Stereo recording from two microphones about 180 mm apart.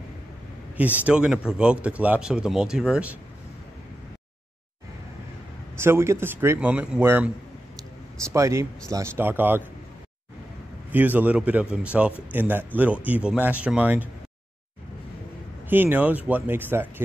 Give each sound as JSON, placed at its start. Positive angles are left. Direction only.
{"t": 0.7, "sound": "a man's voice", "side_deg": -10}
{"t": 5.8, "sound": "speech", "side_deg": -15}
{"t": 8.3, "sound": "speech", "side_deg": -15}
{"t": 10.9, "sound": "speech", "side_deg": -10}
{"t": 15.7, "sound": "speech", "side_deg": -10}